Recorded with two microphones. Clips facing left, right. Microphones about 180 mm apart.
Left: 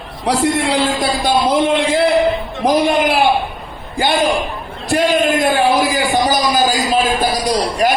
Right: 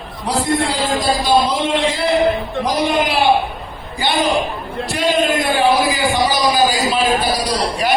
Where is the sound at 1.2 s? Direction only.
55° left (ahead or behind).